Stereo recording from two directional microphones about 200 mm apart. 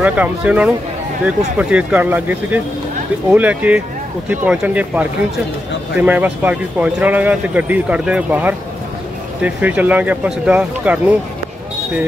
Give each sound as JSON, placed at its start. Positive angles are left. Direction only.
{"t": 0.0, "sound": "speech", "side_deg": -5}